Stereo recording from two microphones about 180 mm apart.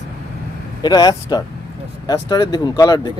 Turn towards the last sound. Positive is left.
turn(degrees=20)  # may be behind; listen again after turning